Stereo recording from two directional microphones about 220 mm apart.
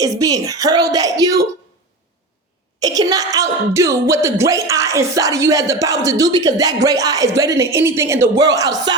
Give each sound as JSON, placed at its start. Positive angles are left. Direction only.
{"t": 0.0, "sound": "speech", "side_deg": -15}
{"t": 2.8, "sound": "speech", "side_deg": -15}